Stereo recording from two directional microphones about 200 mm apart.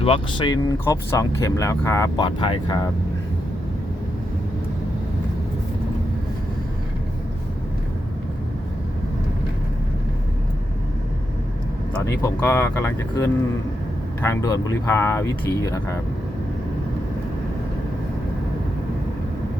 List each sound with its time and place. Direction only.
0.0 s speech: 25° left (ahead or behind)
12.2 s speech: 10° left (ahead or behind)